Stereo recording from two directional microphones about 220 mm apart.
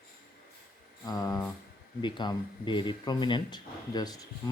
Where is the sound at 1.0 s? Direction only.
15° left (ahead or behind).